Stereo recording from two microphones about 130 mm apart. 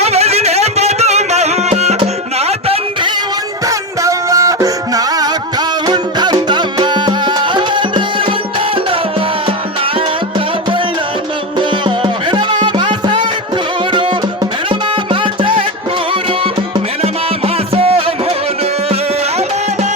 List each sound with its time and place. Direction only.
0.0 s music: 55° right (ahead or behind)
3.7 s music: 25° right (ahead or behind)
11.9 s music: 40° right (ahead or behind)